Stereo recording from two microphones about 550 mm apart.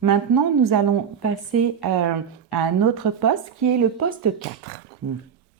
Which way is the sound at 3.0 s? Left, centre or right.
Right.